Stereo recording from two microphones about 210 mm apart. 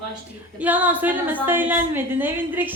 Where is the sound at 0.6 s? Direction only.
5° right (ahead or behind).